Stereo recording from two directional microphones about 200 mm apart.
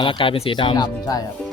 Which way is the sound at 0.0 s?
25° left (ahead or behind).